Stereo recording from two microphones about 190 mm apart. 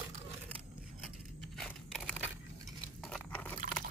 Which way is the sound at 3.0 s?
5° left (ahead or behind).